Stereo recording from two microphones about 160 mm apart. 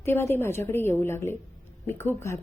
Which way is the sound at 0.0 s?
15° left (ahead or behind).